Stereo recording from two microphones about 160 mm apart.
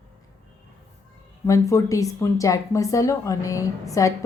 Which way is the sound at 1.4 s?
20° left (ahead or behind).